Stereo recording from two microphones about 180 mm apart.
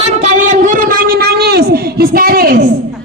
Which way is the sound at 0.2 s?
40° right (ahead or behind).